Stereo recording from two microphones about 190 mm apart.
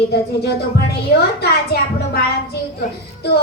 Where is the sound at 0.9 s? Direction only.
60° left (ahead or behind).